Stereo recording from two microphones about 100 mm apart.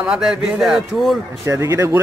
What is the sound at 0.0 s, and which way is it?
Speech, 10° right (ahead or behind).